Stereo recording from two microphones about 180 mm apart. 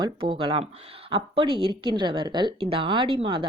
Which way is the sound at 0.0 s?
25° right (ahead or behind).